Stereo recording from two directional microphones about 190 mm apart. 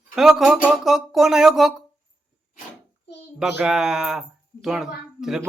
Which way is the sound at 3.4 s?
5° right (ahead or behind).